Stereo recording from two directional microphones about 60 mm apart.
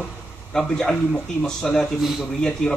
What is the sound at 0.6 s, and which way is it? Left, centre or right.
Speech, centre.